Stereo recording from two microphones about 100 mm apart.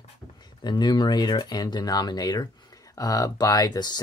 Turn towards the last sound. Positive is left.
turn(degrees=40)  # may be behind; listen again after turning